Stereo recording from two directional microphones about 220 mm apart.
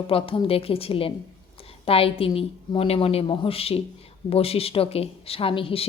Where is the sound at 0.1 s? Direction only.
25° left (ahead or behind).